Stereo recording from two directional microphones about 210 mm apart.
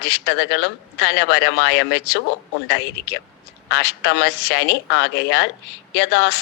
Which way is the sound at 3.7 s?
55° left (ahead or behind).